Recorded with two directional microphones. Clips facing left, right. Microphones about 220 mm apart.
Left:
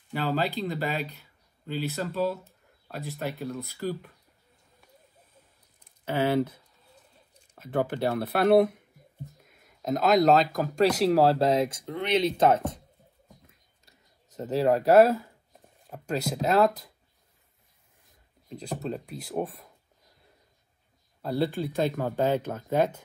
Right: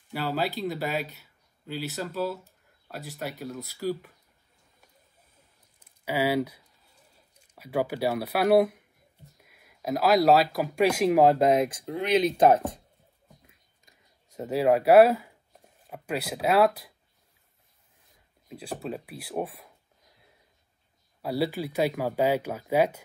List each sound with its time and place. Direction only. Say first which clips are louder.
0.1 s speech: left 1 dB; 5° right (ahead or behind)
6.0 s speech: left 1 dB; 10° right (ahead or behind)
7.4 s speech: even; 10° right (ahead or behind)
13.5 s a sound: left 1 dB; 10° right (ahead or behind)
15.9 s speech: left 2 dB; 10° right (ahead or behind)
18.5 s speech: left 1 dB; 5° right (ahead or behind)
21.2 s speech: even; 10° right (ahead or behind)